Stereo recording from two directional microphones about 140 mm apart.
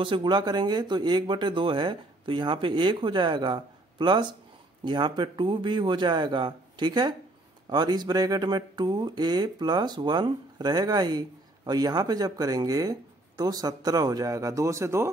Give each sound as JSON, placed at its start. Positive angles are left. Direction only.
{"t": 0.0, "sound": "speech", "side_deg": -35}